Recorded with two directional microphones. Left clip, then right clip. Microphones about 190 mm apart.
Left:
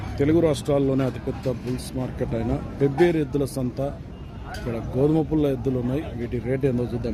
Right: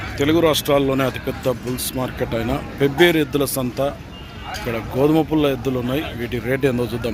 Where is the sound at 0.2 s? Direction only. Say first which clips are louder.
Right 4 dB; 15° left (ahead or behind).